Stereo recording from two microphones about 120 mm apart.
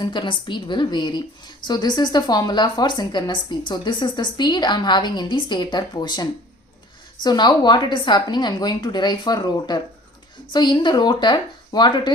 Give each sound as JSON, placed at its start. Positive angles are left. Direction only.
{"t": 0.0, "sound": "a woman's voice", "side_deg": 40}